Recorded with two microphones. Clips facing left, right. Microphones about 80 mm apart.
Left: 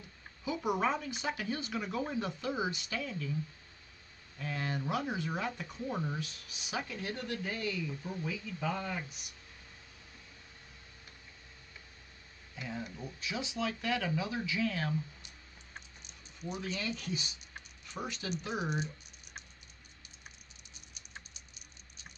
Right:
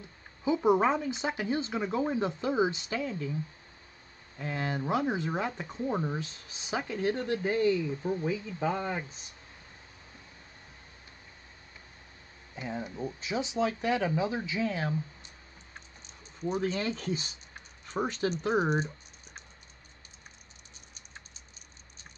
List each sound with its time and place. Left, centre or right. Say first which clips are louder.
0.4 s speech: right 8 dB; right
4.4 s speech: right 4 dB; right
12.5 s speech: right 5 dB; right
16.3 s speech: right 8 dB; right